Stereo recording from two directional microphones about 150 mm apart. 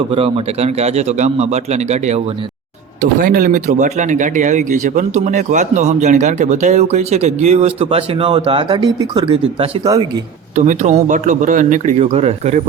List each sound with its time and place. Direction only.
0.1 s speech: 40° right (ahead or behind)
3.0 s speech: 70° right (ahead or behind); by 9.9 s 35° right (ahead or behind)
10.5 s speech: 55° right (ahead or behind)